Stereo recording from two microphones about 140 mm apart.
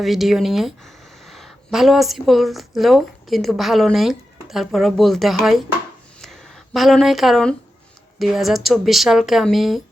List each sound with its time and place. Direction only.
0.0 s speech: centre (ahead or behind)
6.1 s a sound: 5° left (ahead or behind)
8.2 s speech: centre (ahead or behind)